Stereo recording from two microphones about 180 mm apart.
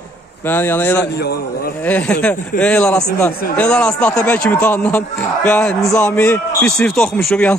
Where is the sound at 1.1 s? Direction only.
60° left (ahead or behind).